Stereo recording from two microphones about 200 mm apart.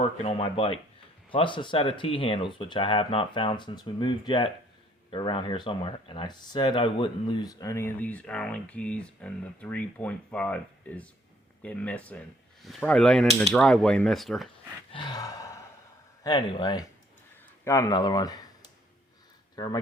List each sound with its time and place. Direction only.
0.0 s speech: 30° left (ahead or behind); by 14.4 s centre (ahead or behind)
14.9 s a sound: 20° left (ahead or behind)
16.2 s speech: 20° left (ahead or behind)